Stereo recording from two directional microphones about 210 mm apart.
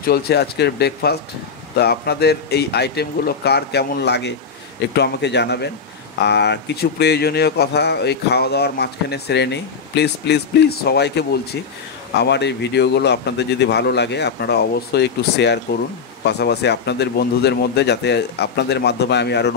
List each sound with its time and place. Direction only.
0.0 s speech: 50° left (ahead or behind)